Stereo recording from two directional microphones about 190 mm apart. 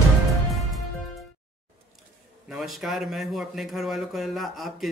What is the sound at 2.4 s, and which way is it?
Speech, centre (ahead or behind).